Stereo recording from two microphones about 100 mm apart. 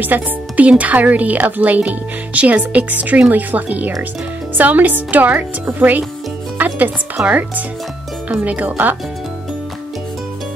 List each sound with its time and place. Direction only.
0.0 s speech: 15° right (ahead or behind)
7.2 s speech: 15° right (ahead or behind)